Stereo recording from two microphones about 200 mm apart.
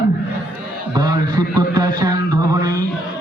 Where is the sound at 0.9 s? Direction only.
20° right (ahead or behind).